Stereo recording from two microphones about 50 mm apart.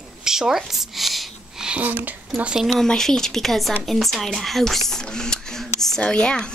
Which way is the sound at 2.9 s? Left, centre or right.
Centre.